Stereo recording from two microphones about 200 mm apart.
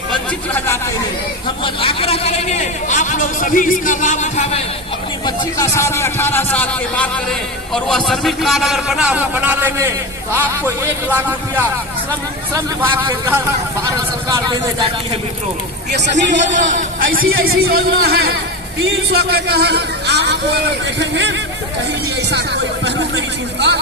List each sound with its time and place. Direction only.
0.3 s speech: 10° left (ahead or behind)
1.6 s a man's voice: 25° left (ahead or behind)
5.2 s a man's voice: 15° left (ahead or behind); by 11.6 s 10° right (ahead or behind)
14.4 s speech: 20° right (ahead or behind)
15.9 s a man's voice: 60° right (ahead or behind)
17.2 s a man's voice: 50° right (ahead or behind)